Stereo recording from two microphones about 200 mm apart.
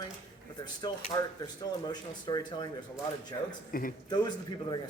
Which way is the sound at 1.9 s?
20° left (ahead or behind).